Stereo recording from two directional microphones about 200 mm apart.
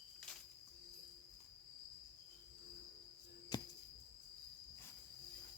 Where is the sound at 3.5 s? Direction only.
20° left (ahead or behind).